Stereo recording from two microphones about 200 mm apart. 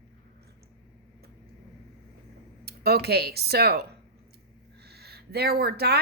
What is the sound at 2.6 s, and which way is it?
Speech, 55° right (ahead or behind).